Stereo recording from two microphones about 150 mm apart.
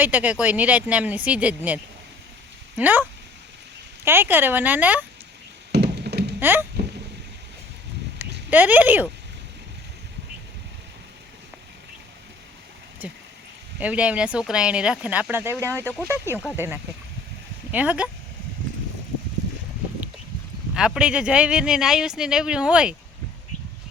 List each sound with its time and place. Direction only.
0.0 s speech: 10° right (ahead or behind)
5.7 s a sound: 90° right
6.4 s speech: 15° right (ahead or behind)
8.2 s speech: 10° right (ahead or behind)
13.0 s speech: 10° right (ahead or behind)
16.2 s speech: 15° left (ahead or behind)
16.6 s speech: 15° right (ahead or behind)
20.7 s speech: 5° right (ahead or behind)